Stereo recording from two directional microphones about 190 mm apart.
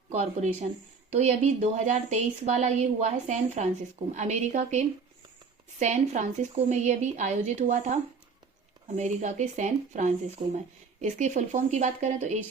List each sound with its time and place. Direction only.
0.1 s a woman's voice: 35° right (ahead or behind)
9.0 s a woman's voice: 40° right (ahead or behind)